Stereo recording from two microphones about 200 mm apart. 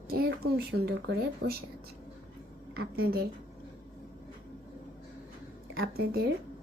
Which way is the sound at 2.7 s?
50° right (ahead or behind).